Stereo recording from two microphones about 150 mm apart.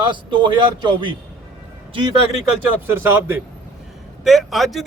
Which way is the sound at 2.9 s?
15° right (ahead or behind).